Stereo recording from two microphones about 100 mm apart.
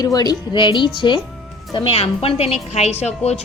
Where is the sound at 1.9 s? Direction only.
80° left.